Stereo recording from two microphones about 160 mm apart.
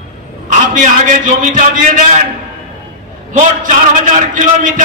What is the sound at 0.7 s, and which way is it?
A man's voice, 55° right (ahead or behind).